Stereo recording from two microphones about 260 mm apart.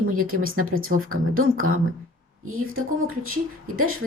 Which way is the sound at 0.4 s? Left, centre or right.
Right.